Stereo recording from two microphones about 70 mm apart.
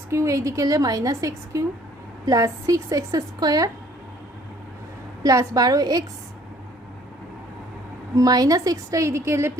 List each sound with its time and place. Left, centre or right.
0.1 s a woman's voice: right
5.2 s a woman's voice: right
8.1 s a woman's voice: right